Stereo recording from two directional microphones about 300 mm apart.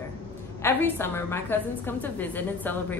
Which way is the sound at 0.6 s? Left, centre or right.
Centre.